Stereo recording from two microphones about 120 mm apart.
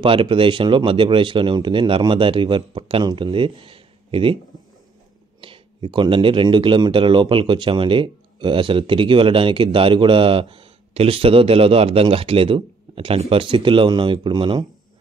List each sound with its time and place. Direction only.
0.0 s speech: 50° right (ahead or behind)
5.4 s speech: 45° right (ahead or behind)